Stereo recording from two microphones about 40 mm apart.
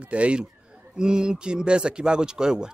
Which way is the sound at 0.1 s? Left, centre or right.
Right.